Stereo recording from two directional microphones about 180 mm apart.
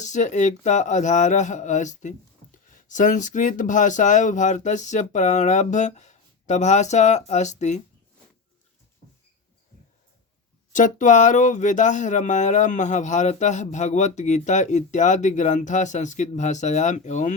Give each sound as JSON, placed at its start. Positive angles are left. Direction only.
{"t": 0.0, "sound": "speech", "side_deg": 40}
{"t": 10.7, "sound": "speech", "side_deg": 45}